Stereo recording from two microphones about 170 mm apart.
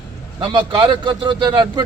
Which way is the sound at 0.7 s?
30° right (ahead or behind).